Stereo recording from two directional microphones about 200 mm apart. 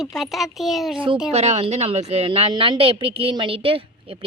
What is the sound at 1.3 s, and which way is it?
A woman's voice, 35° right (ahead or behind).